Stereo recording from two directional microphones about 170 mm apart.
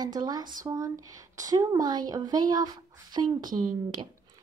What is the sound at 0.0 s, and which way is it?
A woman's voice, 25° right (ahead or behind).